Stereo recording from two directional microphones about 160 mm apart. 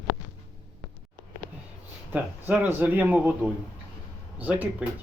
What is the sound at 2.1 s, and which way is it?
Speech, 10° right (ahead or behind).